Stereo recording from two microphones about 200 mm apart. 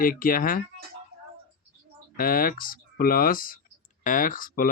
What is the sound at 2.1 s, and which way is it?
Speech, 45° left (ahead or behind).